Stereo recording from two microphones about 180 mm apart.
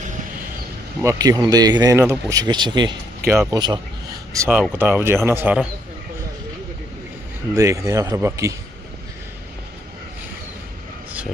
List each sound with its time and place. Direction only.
1.0 s speech: 20° right (ahead or behind)
3.2 s speech: 15° right (ahead or behind)
7.5 s speech: 15° right (ahead or behind)